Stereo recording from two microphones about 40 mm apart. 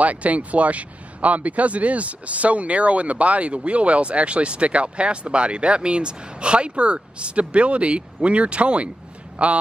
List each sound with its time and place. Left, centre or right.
0.0 s a man's voice: right